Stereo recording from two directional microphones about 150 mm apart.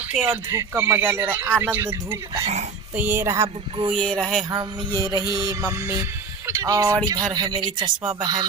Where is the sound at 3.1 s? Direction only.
20° right (ahead or behind).